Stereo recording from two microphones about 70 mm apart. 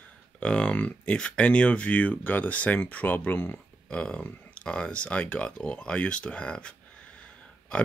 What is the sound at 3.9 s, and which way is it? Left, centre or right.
Speech, centre.